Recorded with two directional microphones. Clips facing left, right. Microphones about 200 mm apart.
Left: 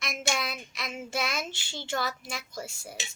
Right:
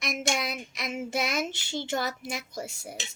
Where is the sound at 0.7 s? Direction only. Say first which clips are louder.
Right 4 dB; 20° right (ahead or behind).